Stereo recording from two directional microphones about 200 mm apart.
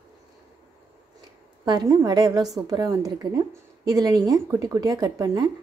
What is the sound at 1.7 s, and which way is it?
A woman's voice, 20° right (ahead or behind).